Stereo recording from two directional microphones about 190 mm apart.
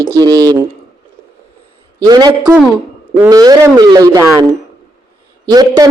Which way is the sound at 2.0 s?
20° right (ahead or behind).